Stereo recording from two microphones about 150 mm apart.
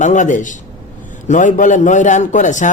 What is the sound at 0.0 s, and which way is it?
Speech, 55° left (ahead or behind).